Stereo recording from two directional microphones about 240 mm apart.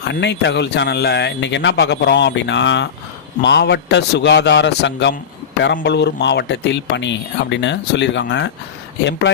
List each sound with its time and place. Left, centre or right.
0.0 s speech: left